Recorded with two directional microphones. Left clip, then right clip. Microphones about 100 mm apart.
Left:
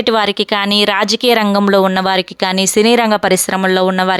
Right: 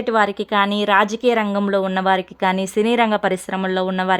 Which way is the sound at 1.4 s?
60° left (ahead or behind).